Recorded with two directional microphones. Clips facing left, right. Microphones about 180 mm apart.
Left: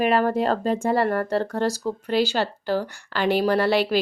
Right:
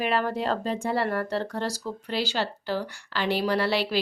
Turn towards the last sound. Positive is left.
turn(degrees=50)  # may be behind; listen again after turning